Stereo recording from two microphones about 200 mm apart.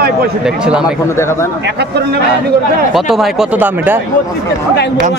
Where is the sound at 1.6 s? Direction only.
55° right (ahead or behind).